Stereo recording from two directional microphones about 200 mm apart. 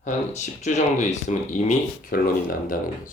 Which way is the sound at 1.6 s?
45° left (ahead or behind).